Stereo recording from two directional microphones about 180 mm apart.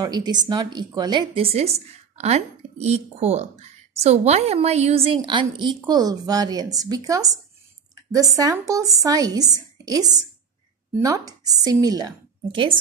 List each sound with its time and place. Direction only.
0.0 s a woman's voice: 20° right (ahead or behind)
7.9 s a sound: 20° right (ahead or behind)
8.4 s a woman's voice: 20° right (ahead or behind)